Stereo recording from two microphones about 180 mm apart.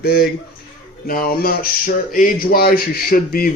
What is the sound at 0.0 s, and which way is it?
Speech, 60° left (ahead or behind).